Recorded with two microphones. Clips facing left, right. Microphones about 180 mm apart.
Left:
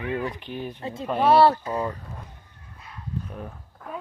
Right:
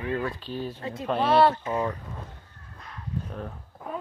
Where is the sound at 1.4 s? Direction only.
35° left (ahead or behind).